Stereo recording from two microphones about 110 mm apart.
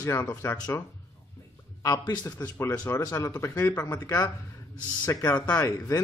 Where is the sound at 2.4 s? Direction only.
25° left (ahead or behind).